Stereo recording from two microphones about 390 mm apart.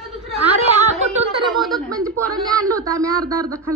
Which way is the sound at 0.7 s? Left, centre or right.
Centre.